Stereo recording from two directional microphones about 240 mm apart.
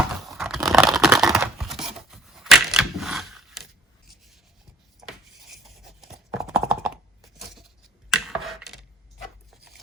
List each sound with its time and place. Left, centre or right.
0.3 s tearing: centre
5.5 s writing: centre
8.1 s a sound: centre